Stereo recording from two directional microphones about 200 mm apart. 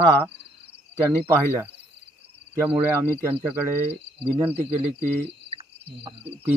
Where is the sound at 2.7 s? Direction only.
10° right (ahead or behind).